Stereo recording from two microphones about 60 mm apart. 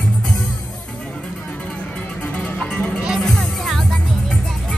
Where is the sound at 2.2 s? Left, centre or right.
Left.